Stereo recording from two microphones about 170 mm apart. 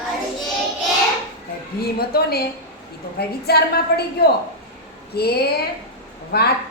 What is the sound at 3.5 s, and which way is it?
A woman's voice, 70° left (ahead or behind).